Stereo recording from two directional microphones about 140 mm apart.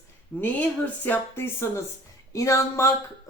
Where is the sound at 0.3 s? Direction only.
15° left (ahead or behind).